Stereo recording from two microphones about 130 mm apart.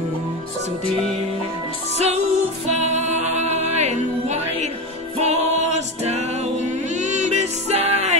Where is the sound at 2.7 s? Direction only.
60° right (ahead or behind).